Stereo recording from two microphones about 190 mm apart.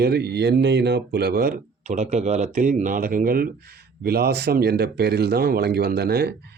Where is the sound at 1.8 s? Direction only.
35° right (ahead or behind).